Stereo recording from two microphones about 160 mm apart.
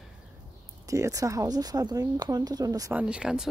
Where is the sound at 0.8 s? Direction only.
20° right (ahead or behind).